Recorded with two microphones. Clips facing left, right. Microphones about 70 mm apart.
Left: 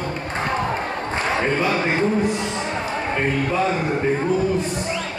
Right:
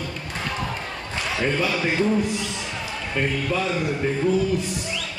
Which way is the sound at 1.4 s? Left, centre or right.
Left.